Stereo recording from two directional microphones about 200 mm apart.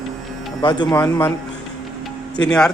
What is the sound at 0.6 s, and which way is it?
Speech, 20° left (ahead or behind).